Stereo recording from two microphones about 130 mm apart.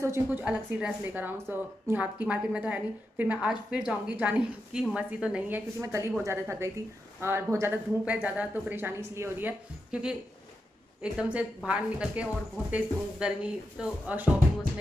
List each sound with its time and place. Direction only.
0.0 s a woman's voice: 15° right (ahead or behind)
5.8 s a woman's voice: 20° right (ahead or behind)